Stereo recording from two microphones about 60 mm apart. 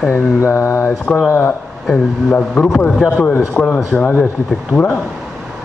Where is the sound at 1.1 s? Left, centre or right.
Left.